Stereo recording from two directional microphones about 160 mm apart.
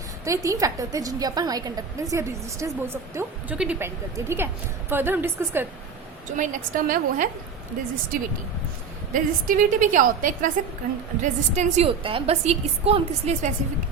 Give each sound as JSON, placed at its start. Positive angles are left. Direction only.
{"t": 0.3, "sound": "a woman's voice", "side_deg": -20}
{"t": 6.3, "sound": "a woman's voice", "side_deg": -55}
{"t": 9.1, "sound": "a woman's voice", "side_deg": -55}
{"t": 11.9, "sound": "a woman's voice", "side_deg": -35}